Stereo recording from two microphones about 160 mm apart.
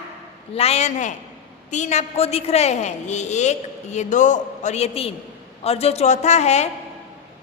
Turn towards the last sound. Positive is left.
turn(degrees=45)  # may be behind; listen again after turning